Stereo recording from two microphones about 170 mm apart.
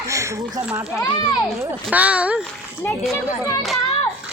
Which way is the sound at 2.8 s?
10° left (ahead or behind).